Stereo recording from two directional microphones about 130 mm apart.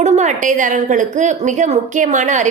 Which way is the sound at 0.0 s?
65° right (ahead or behind).